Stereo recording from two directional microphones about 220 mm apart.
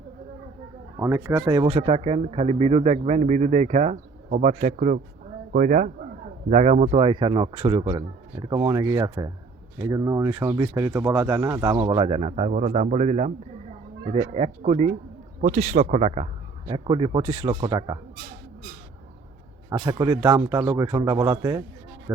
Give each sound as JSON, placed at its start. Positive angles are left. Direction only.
{"t": 0.9, "sound": "speech", "side_deg": -10}
{"t": 19.7, "sound": "speech", "side_deg": -15}